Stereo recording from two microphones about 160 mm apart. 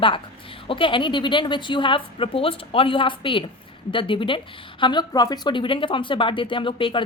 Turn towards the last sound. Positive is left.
turn(degrees=30)  # may be behind; listen again after turning